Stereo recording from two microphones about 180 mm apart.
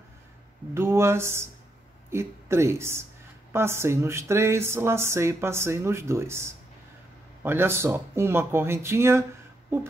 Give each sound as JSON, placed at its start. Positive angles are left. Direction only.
{"t": 0.7, "sound": "speech", "side_deg": -15}